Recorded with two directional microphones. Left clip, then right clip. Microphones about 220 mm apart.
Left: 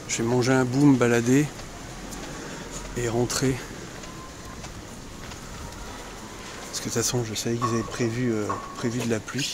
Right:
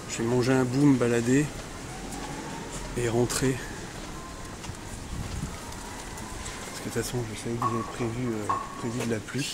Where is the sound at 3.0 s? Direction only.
5° left (ahead or behind).